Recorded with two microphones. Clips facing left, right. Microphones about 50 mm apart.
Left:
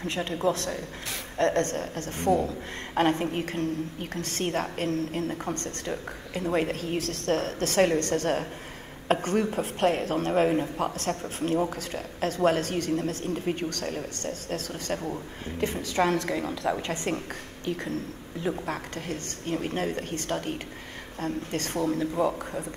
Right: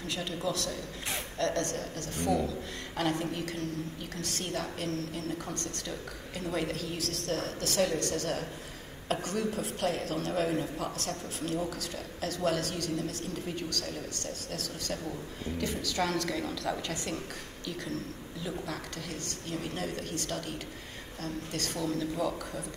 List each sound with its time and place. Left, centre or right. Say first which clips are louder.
0.0 s a woman's voice: left 7 dB; left